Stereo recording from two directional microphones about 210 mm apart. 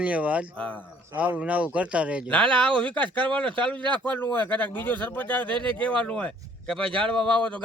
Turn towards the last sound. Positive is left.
turn(degrees=5)  # may be behind; listen again after turning